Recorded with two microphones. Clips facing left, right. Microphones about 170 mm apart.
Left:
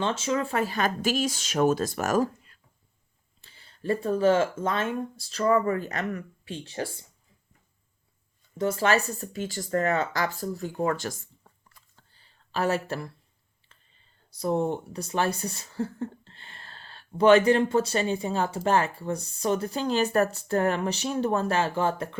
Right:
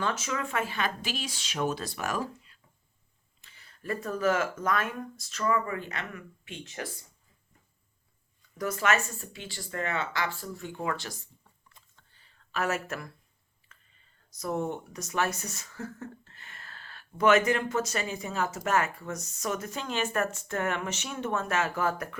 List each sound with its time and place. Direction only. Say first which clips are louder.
0.0 s speech: left 5 dB; 30° left (ahead or behind); by 2.6 s 45° left (ahead or behind)
3.4 s speech: left 8 dB; 30° left (ahead or behind)
8.4 s speech: left 6 dB; 25° left (ahead or behind); by 11.3 s 50° left (ahead or behind)
11.9 s a sound: left 2 dB; 30° left (ahead or behind)
14.3 s speech: left 5 dB; 30° left (ahead or behind)